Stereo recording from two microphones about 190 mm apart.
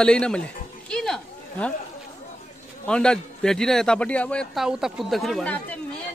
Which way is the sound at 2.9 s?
5° left (ahead or behind).